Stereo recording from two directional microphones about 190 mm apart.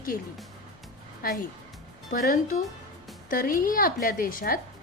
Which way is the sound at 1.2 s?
50° left (ahead or behind).